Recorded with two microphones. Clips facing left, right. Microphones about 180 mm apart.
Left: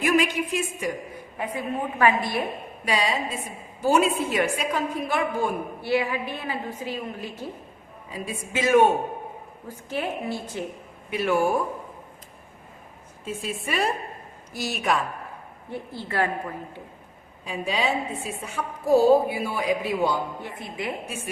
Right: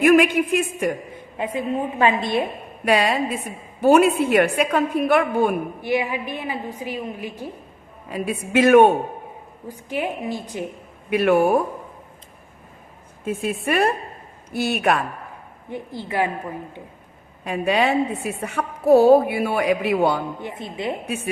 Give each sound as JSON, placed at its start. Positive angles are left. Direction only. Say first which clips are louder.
{"t": 0.0, "sound": "a woman's voice", "louder": "right 7 dB", "side_deg": -55}
{"t": 1.5, "sound": "a woman's voice", "louder": "right 4 dB", "side_deg": -20}
{"t": 2.8, "sound": "a woman's voice", "louder": "right 6 dB", "side_deg": -60}
{"t": 5.8, "sound": "a woman's voice", "louder": "left 1 dB", "side_deg": -15}
{"t": 8.1, "sound": "a woman's voice", "louder": "right 9 dB", "side_deg": -65}
{"t": 9.6, "sound": "a woman's voice", "louder": "right 3 dB", "side_deg": -15}
{"t": 11.1, "sound": "a woman's voice", "louder": "right 6 dB", "side_deg": -60}
{"t": 13.2, "sound": "a woman's voice", "louder": "right 7 dB", "side_deg": -60}
{"t": 15.7, "sound": "a woman's voice", "louder": "right 3 dB", "side_deg": -15}
{"t": 17.4, "sound": "a woman's voice", "louder": "right 6 dB", "side_deg": -60}
{"t": 20.4, "sound": "a woman's voice", "louder": "right 4 dB", "side_deg": -20}